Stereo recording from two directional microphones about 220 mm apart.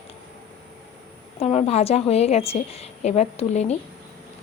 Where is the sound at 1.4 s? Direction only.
30° left (ahead or behind).